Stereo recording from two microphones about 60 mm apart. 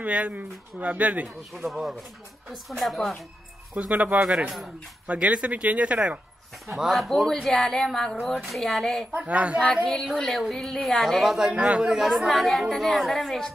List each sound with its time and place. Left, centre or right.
0.0 s speech: right
1.7 s speech: centre
3.7 s speech: right
6.7 s speech: centre
9.1 s speech: right
10.0 s speech: centre
11.5 s speech: right
11.8 s speech: centre